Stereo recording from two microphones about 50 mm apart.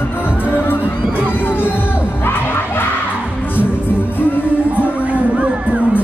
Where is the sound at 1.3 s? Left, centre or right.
Left.